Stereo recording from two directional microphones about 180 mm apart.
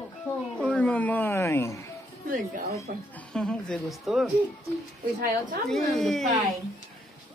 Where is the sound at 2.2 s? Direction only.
50° right (ahead or behind).